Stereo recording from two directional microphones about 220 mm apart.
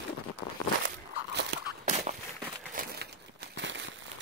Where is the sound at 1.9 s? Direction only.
35° right (ahead or behind).